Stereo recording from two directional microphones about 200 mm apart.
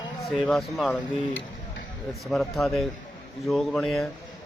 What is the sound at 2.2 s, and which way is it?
Speech, centre (ahead or behind).